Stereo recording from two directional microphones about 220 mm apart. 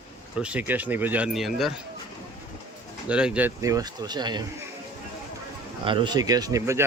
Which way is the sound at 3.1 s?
5° right (ahead or behind).